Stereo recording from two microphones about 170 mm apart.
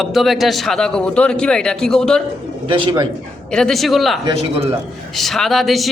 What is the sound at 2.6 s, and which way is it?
Speech, 30° right (ahead or behind).